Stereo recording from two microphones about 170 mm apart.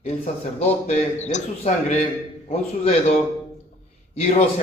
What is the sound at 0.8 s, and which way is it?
Speech, 40° left (ahead or behind).